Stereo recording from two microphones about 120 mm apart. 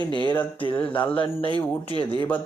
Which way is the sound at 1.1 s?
45° left (ahead or behind).